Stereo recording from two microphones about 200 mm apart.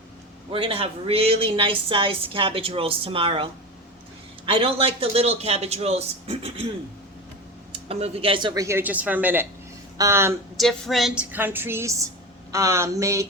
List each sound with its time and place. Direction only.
0.5 s speech: 25° right (ahead or behind)
7.7 s a woman's voice: 30° right (ahead or behind); by 10.3 s 15° right (ahead or behind)
10.6 s a woman's voice: centre (ahead or behind); by 13.2 s 15° right (ahead or behind)